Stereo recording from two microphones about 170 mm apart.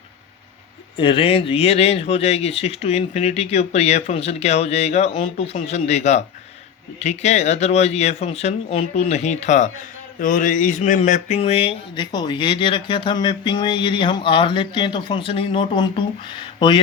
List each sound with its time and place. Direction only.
0.9 s speech: 30° left (ahead or behind)
10.2 s a sound: 50° left (ahead or behind); by 16.0 s 30° left (ahead or behind)
16.6 s speech: 30° left (ahead or behind)